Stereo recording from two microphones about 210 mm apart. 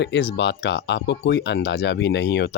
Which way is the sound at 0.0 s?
55° left (ahead or behind).